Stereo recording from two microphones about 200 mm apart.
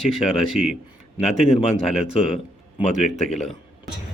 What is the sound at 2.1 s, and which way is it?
Speech, 30° left (ahead or behind).